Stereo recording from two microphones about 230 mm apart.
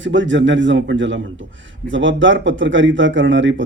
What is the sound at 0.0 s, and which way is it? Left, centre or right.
Speech, right.